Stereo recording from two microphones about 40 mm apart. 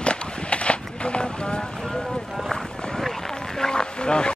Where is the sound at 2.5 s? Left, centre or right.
Centre.